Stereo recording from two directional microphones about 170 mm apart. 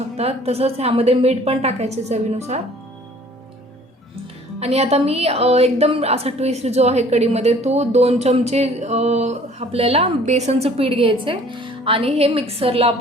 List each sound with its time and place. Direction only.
0.2 s a woman's voice: 35° right (ahead or behind)
4.6 s a woman's voice: 40° right (ahead or behind)